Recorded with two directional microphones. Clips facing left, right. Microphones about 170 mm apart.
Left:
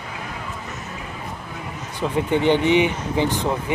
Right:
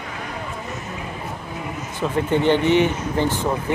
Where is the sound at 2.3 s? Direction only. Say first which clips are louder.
Even; 15° left (ahead or behind).